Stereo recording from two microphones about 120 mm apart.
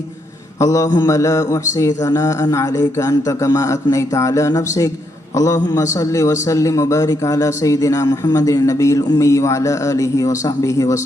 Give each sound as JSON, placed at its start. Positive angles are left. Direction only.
{"t": 0.6, "sound": "a man's voice", "side_deg": 30}